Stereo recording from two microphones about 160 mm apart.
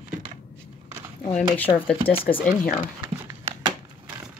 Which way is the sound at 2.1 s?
35° left (ahead or behind).